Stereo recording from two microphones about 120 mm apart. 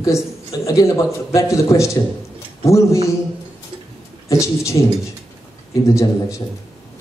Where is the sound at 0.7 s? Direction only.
25° left (ahead or behind).